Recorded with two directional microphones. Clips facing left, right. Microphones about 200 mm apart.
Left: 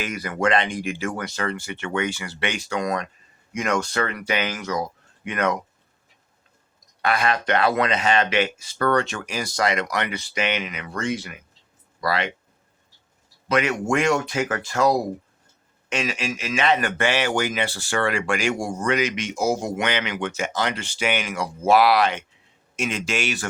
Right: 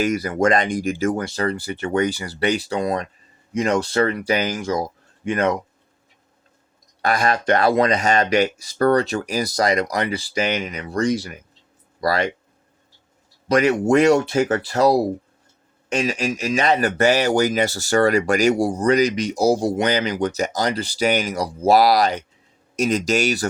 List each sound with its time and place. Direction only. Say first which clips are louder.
0.0 s speech: right 6 dB; 35° right (ahead or behind)
7.0 s speech: right 2 dB; 40° right (ahead or behind)
13.5 s speech: right 6 dB; 40° right (ahead or behind)